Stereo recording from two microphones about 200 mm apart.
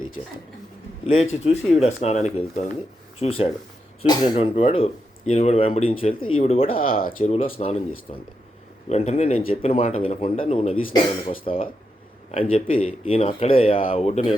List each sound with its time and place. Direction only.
1.0 s speech: 30° left (ahead or behind)
6.7 s speech: 45° left (ahead or behind)
7.5 s speech: 30° left (ahead or behind)